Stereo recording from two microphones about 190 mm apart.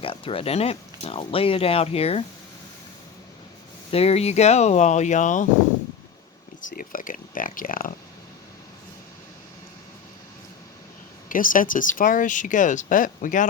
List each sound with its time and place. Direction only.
0.0 s speech: 30° left (ahead or behind)
3.9 s speech: 30° left (ahead or behind)
6.7 s speech: 45° left (ahead or behind)
11.3 s speech: 45° left (ahead or behind)